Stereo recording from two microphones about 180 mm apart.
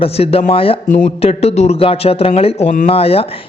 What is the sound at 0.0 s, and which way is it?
Speech, 35° left (ahead or behind).